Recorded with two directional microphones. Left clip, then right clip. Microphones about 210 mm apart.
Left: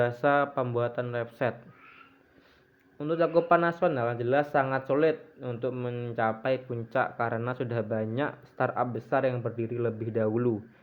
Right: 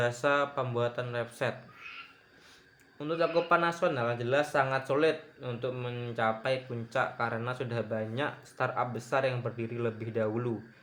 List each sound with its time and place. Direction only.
0.0 s speech: 35° left (ahead or behind)
3.0 s speech: 35° left (ahead or behind)